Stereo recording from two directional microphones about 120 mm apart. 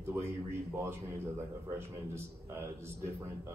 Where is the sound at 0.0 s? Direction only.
20° right (ahead or behind).